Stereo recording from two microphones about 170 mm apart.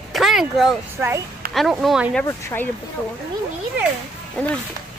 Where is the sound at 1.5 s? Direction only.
Centre (ahead or behind).